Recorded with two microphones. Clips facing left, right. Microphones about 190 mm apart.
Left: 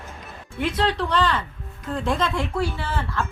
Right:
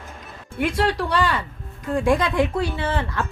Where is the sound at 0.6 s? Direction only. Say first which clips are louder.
Right 2 dB; 10° right (ahead or behind).